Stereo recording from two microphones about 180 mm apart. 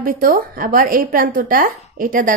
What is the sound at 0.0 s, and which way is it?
A woman's voice, 50° right (ahead or behind).